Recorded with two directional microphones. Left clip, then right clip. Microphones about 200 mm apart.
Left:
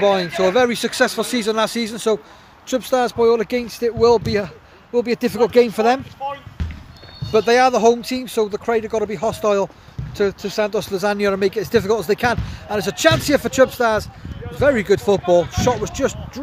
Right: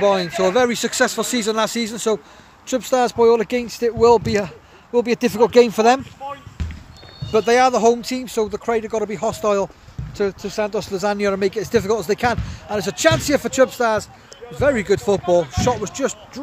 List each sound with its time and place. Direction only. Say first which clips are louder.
0.0 s speech: left 1 dB; 15° right (ahead or behind)
7.3 s speech: left 1 dB; 15° right (ahead or behind)